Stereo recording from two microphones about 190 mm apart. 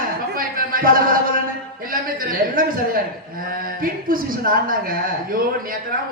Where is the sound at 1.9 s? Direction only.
50° right (ahead or behind).